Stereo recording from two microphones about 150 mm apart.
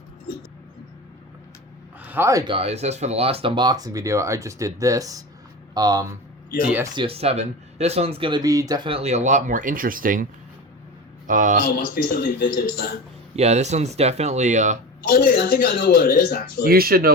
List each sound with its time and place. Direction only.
2.0 s a sound: 10° right (ahead or behind)
2.5 s speech: 40° right (ahead or behind); by 6.1 s 25° right (ahead or behind)
6.9 s speech: 35° right (ahead or behind)
8.9 s speech: 45° right (ahead or behind); by 10.2 s 65° right (ahead or behind)
11.3 s speech: 60° right (ahead or behind)
12.1 s speech: 90° left
13.3 s speech: 45° right (ahead or behind)
15.1 s speech: 85° left
16.6 s speech: 85° right